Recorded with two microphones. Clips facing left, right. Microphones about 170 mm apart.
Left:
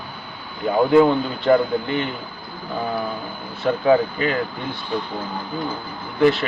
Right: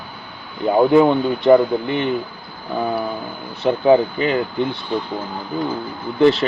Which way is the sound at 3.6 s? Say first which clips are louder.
Right 3 dB; 25° right (ahead or behind).